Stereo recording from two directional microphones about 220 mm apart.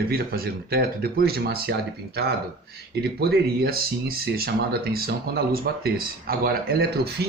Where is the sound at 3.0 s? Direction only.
45° right (ahead or behind).